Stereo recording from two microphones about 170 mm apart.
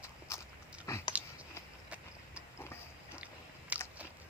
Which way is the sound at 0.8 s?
20° left (ahead or behind).